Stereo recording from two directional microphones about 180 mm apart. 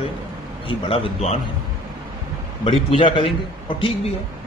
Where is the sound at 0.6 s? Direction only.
30° left (ahead or behind).